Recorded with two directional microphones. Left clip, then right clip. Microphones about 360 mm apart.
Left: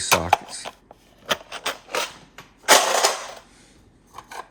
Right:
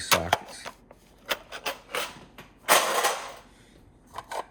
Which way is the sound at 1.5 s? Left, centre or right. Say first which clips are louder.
Left 5 dB; left.